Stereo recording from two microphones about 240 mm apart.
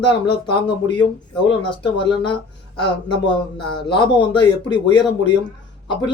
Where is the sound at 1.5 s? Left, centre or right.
Left.